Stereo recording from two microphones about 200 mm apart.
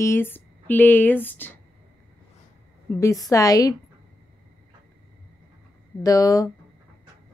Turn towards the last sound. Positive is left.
turn(degrees=15)  # may be behind; listen again after turning